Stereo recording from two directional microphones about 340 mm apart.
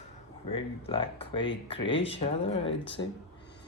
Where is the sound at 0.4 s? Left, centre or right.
Centre.